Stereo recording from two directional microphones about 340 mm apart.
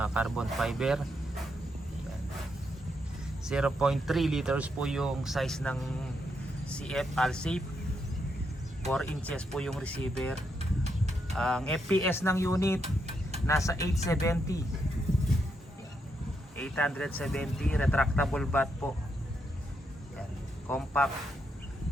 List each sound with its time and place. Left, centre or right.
0.0 s speech: centre
3.4 s speech: centre
8.9 s speech: centre
10.6 s a sound: centre
11.3 s speech: centre
12.8 s a sound: centre
13.5 s speech: centre
16.6 s speech: centre
20.7 s speech: centre